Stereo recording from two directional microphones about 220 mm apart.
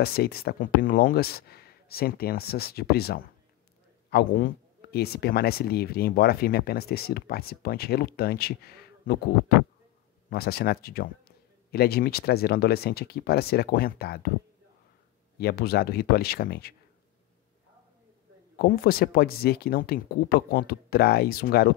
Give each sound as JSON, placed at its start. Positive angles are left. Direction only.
{"t": 0.0, "sound": "speech", "side_deg": 45}
{"t": 10.3, "sound": "speech", "side_deg": 45}
{"t": 15.3, "sound": "speech", "side_deg": 45}
{"t": 18.6, "sound": "speech", "side_deg": 45}